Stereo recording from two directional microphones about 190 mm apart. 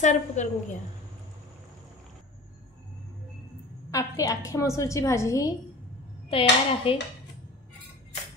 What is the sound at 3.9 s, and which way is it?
A woman's voice, 15° left (ahead or behind).